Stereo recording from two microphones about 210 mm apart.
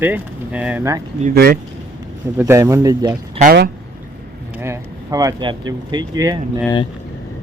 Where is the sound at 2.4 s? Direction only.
15° right (ahead or behind).